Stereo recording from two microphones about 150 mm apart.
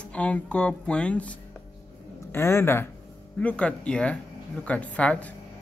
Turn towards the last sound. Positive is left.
turn(degrees=10)  # may be behind; listen again after turning